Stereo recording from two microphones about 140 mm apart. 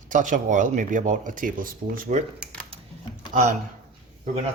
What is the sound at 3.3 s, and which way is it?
Speech, 70° right (ahead or behind).